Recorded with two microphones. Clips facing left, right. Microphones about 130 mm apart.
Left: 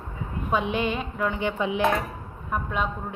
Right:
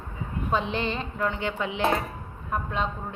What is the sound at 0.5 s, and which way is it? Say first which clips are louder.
A woman's voice: left 2 dB; 15° left (ahead or behind).